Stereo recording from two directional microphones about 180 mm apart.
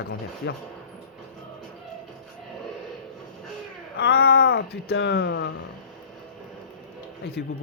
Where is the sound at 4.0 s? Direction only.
60° left (ahead or behind).